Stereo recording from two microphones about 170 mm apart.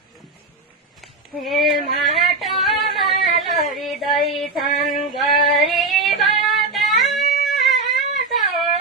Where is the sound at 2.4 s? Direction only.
Centre (ahead or behind).